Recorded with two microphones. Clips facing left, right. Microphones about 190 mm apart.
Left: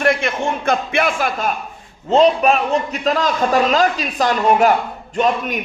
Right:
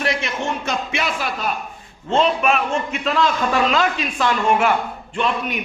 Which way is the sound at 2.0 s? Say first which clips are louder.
Left 5 dB; 40° left (ahead or behind).